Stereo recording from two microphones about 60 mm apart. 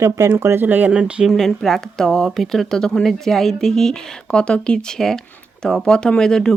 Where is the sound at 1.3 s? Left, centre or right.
Centre.